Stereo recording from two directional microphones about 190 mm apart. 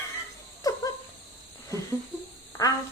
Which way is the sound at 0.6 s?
20° left (ahead or behind).